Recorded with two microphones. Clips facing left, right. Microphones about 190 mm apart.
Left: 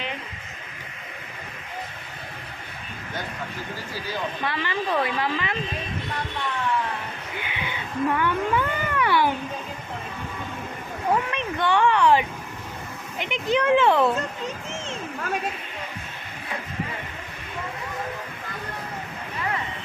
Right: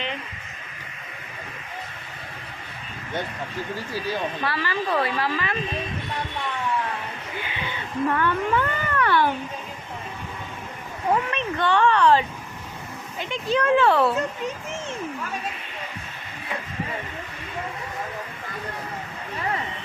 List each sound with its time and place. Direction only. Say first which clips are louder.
4.4 s a woman's voice: left 1 dB; 20° left (ahead or behind)
7.3 s cat: even; 15° left (ahead or behind)
11.3 s a sound: right 1 dB; 15° left (ahead or behind)
13.1 s speech: left 1 dB; 20° left (ahead or behind)